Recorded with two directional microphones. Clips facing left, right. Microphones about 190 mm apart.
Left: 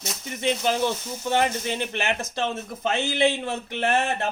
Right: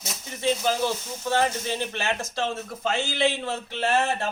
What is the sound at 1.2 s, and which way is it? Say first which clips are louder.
Speech: left 1 dB; 15° left (ahead or behind).